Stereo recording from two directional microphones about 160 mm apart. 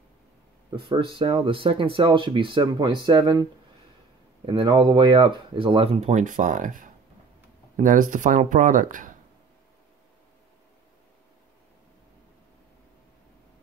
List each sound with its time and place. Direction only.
0.8 s speech: 30° right (ahead or behind)
4.5 s speech: 30° right (ahead or behind); by 9.1 s 55° right (ahead or behind)